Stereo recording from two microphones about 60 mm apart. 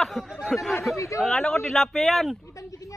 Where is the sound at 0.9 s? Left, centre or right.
Left.